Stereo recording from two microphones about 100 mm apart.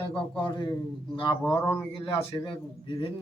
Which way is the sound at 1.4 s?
25° left (ahead or behind).